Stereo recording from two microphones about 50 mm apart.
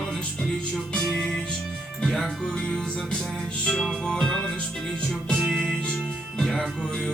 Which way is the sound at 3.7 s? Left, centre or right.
Centre.